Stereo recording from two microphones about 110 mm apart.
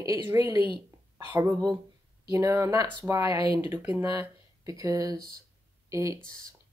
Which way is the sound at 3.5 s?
35° right (ahead or behind).